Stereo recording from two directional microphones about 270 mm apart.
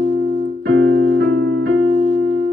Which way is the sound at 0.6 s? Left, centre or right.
Right.